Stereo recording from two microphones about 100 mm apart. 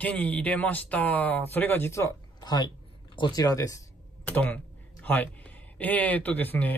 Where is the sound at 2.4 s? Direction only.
45° left (ahead or behind).